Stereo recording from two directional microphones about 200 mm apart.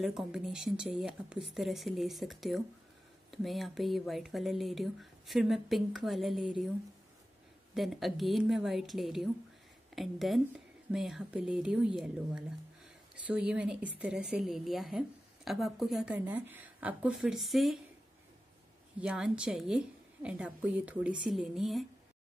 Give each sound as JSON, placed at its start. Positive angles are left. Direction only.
{"t": 0.0, "sound": "a woman's voice", "side_deg": 0}
{"t": 7.7, "sound": "a woman's voice", "side_deg": 0}
{"t": 18.9, "sound": "a woman's voice", "side_deg": -5}